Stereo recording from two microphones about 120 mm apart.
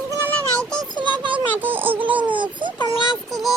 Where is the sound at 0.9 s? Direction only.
40° right (ahead or behind).